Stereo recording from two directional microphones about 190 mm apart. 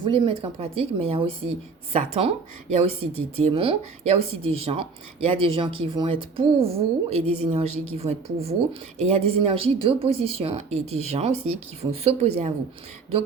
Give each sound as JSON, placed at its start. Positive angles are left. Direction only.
{"t": 0.0, "sound": "a woman's voice", "side_deg": -25}